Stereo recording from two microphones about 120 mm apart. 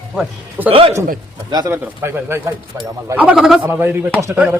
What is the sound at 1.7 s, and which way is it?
Speech, 20° right (ahead or behind).